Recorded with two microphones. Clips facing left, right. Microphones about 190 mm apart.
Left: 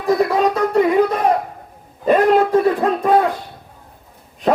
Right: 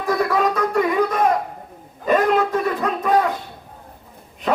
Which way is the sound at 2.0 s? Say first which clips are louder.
Left 4 dB; 35° left (ahead or behind).